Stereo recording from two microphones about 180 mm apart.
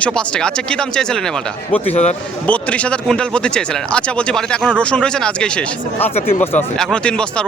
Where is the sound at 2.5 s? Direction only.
5° left (ahead or behind).